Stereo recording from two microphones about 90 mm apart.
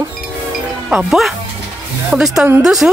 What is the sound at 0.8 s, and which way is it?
Speech, 5° right (ahead or behind).